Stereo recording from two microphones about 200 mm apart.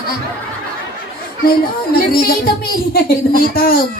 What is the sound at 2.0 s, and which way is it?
Speech, 50° left (ahead or behind).